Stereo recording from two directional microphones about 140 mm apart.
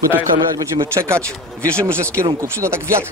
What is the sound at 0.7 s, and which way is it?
Speech, 20° right (ahead or behind).